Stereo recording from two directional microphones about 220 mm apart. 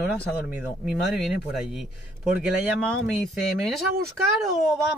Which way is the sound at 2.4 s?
Centre (ahead or behind).